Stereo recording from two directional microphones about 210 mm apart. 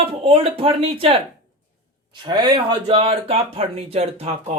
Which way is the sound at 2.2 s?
20° right (ahead or behind).